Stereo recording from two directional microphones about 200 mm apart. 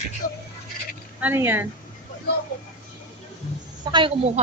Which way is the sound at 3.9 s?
25° right (ahead or behind).